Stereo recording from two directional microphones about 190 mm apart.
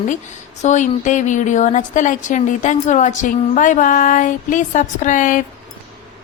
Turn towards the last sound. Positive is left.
turn(degrees=40)  # may be behind; listen again after turning